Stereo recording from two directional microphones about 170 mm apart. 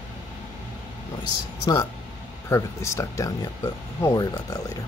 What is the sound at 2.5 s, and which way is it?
Speech, 15° left (ahead or behind).